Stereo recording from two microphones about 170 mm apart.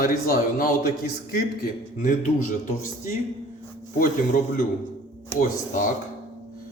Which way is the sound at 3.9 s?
55° left (ahead or behind).